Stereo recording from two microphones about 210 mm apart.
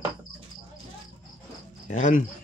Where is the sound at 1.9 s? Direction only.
35° left (ahead or behind).